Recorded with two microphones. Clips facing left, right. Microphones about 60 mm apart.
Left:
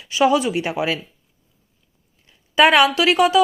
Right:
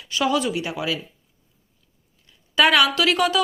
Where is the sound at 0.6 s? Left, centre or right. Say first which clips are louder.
Left 4 dB; left.